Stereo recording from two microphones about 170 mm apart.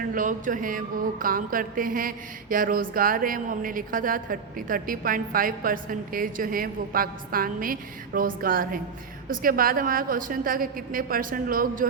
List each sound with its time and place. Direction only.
0.1 s mantra: 50° right (ahead or behind)